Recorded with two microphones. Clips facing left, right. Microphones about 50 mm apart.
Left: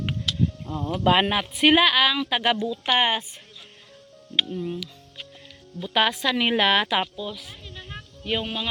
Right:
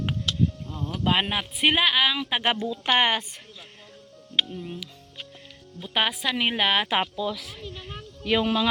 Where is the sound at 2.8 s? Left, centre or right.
Right.